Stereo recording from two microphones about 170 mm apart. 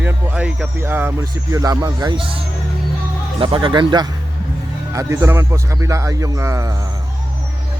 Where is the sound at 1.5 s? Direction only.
20° right (ahead or behind).